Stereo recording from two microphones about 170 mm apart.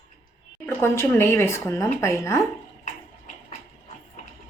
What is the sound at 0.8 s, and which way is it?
Speech, 15° left (ahead or behind).